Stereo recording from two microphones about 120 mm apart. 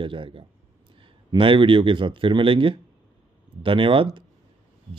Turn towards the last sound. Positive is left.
turn(degrees=-45)  # may be behind; listen again after turning